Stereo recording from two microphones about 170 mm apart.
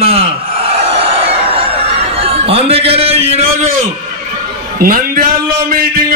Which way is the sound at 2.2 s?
35° right (ahead or behind).